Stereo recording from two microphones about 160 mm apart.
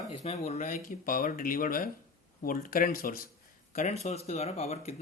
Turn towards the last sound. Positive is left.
turn(degrees=40)  # may be behind; listen again after turning